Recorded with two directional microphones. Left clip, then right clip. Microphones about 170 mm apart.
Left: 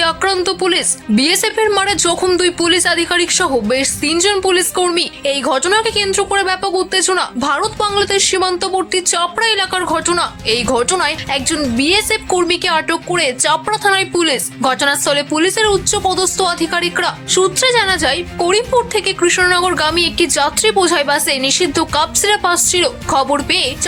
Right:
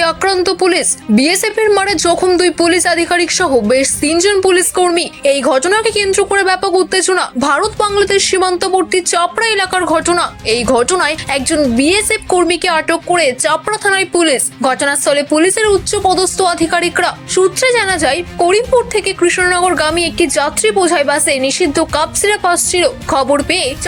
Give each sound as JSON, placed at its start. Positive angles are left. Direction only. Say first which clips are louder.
{"t": 0.0, "sound": "a woman's voice", "louder": "right 2 dB", "side_deg": -15}